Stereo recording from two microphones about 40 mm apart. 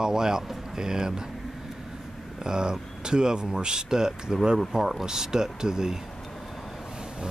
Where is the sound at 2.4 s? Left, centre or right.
Centre.